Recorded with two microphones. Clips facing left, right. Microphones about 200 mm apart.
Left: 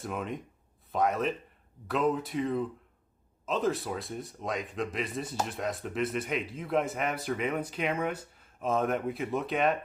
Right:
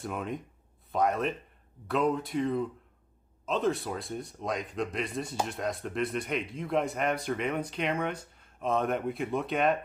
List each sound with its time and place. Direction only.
0.0 s a man's voice: centre (ahead or behind)